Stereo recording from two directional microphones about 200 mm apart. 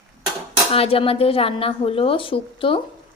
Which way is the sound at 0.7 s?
30° left (ahead or behind).